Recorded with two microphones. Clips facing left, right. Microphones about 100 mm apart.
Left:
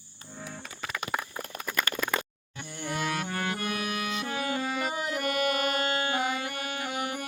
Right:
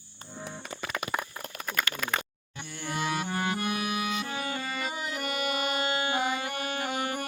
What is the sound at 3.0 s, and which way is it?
Music, 15° right (ahead or behind).